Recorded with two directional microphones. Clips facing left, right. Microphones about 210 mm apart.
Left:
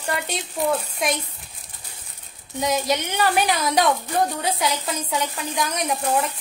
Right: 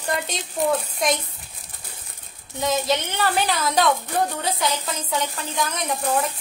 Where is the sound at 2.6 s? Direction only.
15° left (ahead or behind).